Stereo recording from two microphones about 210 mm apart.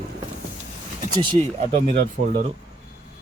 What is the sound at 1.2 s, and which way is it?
Speech, 25° right (ahead or behind).